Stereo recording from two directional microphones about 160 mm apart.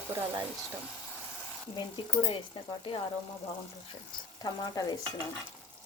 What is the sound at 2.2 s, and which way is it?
Speech, 30° left (ahead or behind).